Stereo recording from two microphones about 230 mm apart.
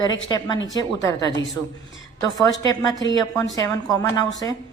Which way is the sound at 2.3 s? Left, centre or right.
Centre.